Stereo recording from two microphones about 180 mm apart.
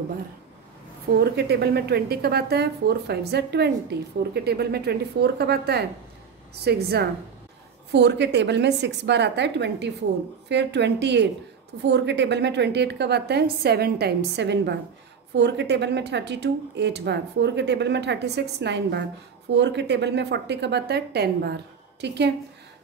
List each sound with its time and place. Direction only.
1.2 s speech: 65° right (ahead or behind)